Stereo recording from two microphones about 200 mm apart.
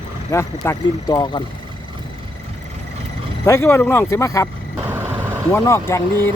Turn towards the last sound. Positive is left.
turn(degrees=10)  # may be behind; listen again after turning